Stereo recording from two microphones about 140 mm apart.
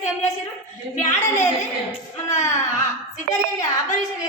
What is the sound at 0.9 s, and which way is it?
Speech, 55° left (ahead or behind).